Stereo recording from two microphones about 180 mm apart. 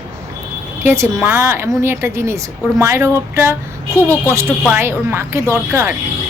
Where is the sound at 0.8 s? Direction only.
15° right (ahead or behind).